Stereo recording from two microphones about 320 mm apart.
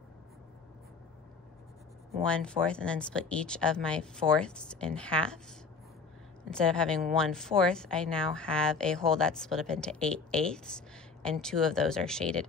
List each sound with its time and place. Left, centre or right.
2.2 s speech: centre
6.5 s speech: centre